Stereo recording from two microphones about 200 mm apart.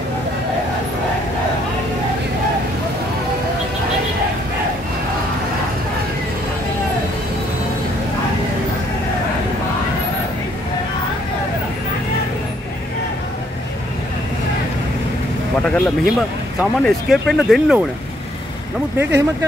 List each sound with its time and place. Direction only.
15.6 s speech: 5° left (ahead or behind)
18.9 s speech: 10° right (ahead or behind)